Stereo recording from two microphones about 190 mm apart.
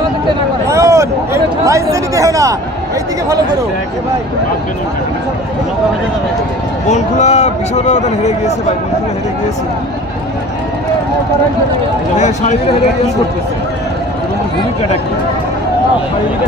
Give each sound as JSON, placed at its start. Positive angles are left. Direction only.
{"t": 0.7, "sound": "a sound", "side_deg": -15}
{"t": 6.9, "sound": "speech", "side_deg": 35}
{"t": 12.2, "sound": "speech", "side_deg": 40}